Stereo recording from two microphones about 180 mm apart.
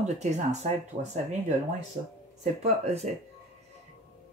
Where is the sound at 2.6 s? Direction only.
35° right (ahead or behind).